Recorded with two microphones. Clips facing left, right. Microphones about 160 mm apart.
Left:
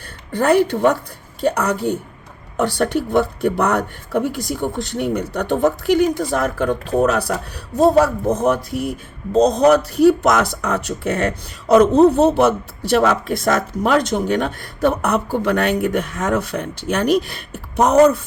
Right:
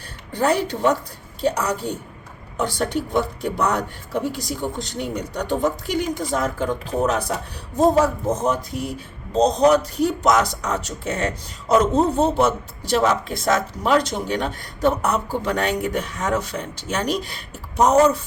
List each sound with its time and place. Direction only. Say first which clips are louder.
0.3 s speech: left 5 dB; 55° left (ahead or behind)